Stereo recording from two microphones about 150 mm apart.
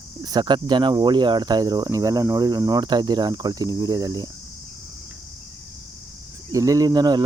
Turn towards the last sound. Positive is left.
turn(degrees=-25)  # may be behind; listen again after turning